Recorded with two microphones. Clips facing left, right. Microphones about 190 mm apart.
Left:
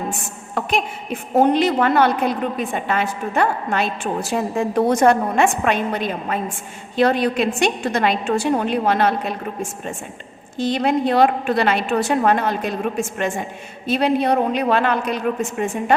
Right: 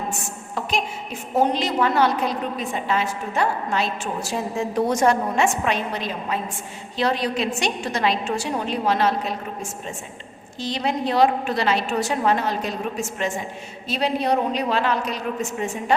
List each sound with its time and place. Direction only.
0.5 s a woman's voice: 60° left (ahead or behind)